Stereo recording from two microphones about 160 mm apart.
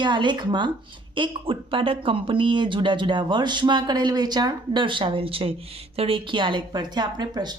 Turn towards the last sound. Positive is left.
turn(degrees=-25)  # may be behind; listen again after turning